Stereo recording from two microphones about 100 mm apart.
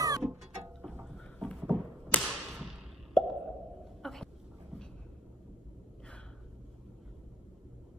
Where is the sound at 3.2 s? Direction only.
5° left (ahead or behind).